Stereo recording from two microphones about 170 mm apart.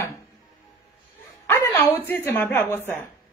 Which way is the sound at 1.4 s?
15° left (ahead or behind).